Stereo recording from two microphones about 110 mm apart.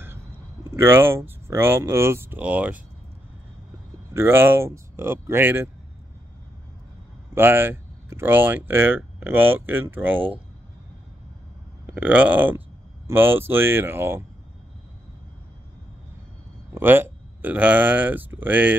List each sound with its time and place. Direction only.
0.7 s speech: 20° right (ahead or behind)
4.1 s speech: 20° right (ahead or behind)
7.3 s speech: 20° right (ahead or behind)
11.8 s speech: 15° right (ahead or behind)
16.7 s speech: 20° right (ahead or behind)